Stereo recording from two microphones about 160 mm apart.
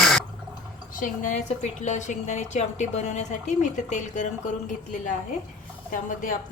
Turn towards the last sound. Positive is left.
turn(degrees=55)  # may be behind; listen again after turning